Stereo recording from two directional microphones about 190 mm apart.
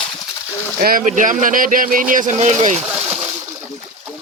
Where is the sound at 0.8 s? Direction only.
50° right (ahead or behind).